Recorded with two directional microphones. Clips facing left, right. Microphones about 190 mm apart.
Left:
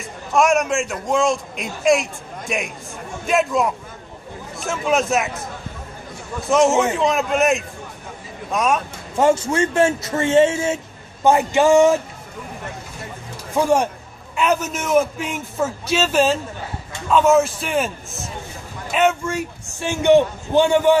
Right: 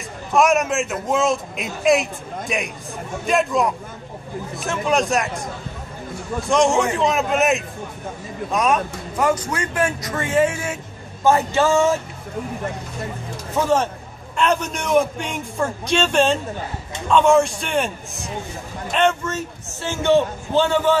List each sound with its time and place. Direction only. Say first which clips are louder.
0.3 s a man's voice: even; centre (ahead or behind)
6.5 s a man's voice: left 2 dB; 5° left (ahead or behind)
9.1 s a man's voice: left 4 dB; 25° left (ahead or behind)
13.6 s a man's voice: left 2 dB; 10° left (ahead or behind)